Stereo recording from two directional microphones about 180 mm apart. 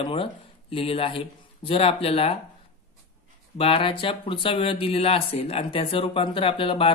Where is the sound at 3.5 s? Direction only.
30° left (ahead or behind).